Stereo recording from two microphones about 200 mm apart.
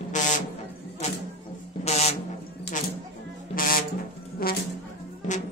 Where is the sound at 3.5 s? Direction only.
45° left (ahead or behind).